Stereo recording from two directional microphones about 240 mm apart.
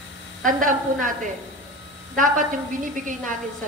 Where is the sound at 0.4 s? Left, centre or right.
Right.